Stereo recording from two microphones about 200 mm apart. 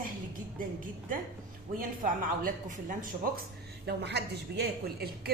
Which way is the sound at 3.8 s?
55° right (ahead or behind).